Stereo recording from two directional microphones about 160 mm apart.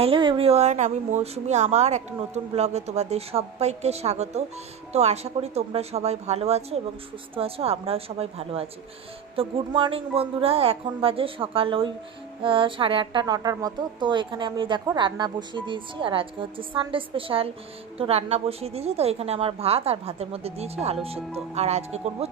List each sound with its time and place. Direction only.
0.0 s a woman's voice: 30° right (ahead or behind)